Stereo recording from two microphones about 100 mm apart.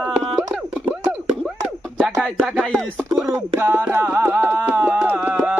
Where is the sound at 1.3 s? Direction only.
5° right (ahead or behind).